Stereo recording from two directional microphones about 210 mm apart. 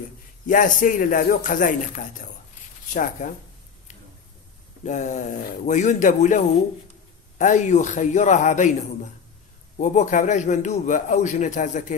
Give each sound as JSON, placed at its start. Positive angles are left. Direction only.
{"t": 0.5, "sound": "a man's voice", "side_deg": 40}
{"t": 4.8, "sound": "a man's voice", "side_deg": 35}
{"t": 9.8, "sound": "a man's voice", "side_deg": 35}